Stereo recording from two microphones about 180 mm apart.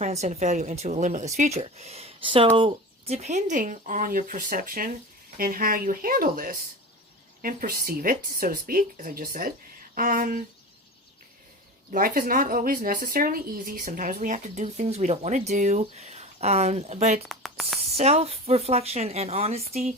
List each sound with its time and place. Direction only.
0.0 s speech: 40° right (ahead or behind)
11.9 s speech: 50° right (ahead or behind)
17.2 s speech: centre (ahead or behind)
17.9 s speech: 35° right (ahead or behind)